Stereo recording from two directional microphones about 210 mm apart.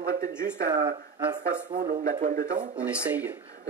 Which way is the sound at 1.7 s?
35° right (ahead or behind).